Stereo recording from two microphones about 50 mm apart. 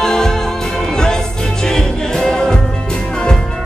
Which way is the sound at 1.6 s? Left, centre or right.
Centre.